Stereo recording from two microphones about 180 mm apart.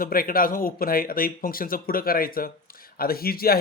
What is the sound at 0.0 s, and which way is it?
Speech, 55° left (ahead or behind).